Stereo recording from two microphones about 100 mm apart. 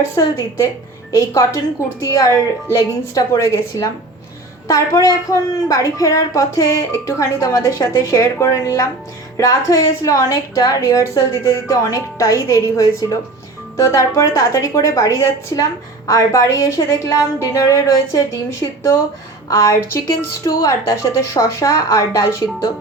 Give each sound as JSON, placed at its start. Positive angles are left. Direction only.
{"t": 0.1, "sound": "a woman's voice", "side_deg": 30}